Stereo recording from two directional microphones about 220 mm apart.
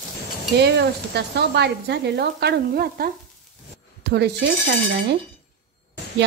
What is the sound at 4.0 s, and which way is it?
Dishes, 50° right (ahead or behind).